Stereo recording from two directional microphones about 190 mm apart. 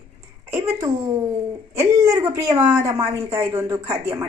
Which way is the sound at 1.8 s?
15° right (ahead or behind).